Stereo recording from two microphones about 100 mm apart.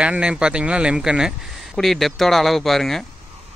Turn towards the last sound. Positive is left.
turn(degrees=0)  # may be behind; listen again after turning